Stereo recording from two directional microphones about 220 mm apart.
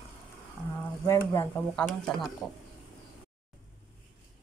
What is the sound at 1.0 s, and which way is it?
Speech, 10° left (ahead or behind).